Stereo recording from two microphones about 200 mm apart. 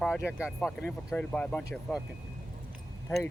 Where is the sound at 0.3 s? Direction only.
5° right (ahead or behind).